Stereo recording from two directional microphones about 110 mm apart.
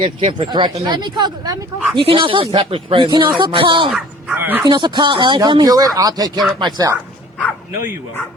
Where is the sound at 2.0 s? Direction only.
50° right (ahead or behind).